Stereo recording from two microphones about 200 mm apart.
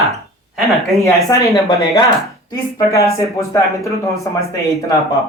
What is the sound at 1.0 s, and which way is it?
A woman's voice, 15° left (ahead or behind).